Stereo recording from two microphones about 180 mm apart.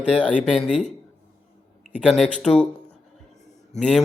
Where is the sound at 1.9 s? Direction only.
5° right (ahead or behind).